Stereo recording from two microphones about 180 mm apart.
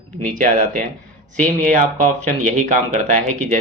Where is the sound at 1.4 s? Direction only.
45° right (ahead or behind).